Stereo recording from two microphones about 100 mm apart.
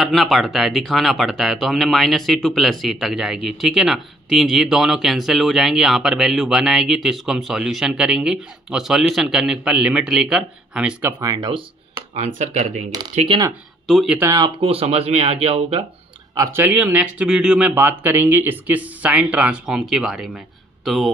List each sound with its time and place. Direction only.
0.0 s speech: centre (ahead or behind); by 11.1 s 15° right (ahead or behind)
11.1 s speech: 35° right (ahead or behind)
13.8 s speech: centre (ahead or behind)
14.6 s speech: 80° right
16.5 s speech: 20° right (ahead or behind); by 21.1 s centre (ahead or behind)